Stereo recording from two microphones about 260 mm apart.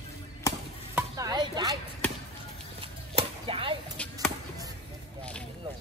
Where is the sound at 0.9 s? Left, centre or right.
Centre.